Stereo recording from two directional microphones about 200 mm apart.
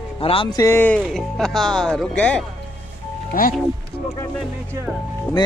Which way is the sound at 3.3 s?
45° left (ahead or behind).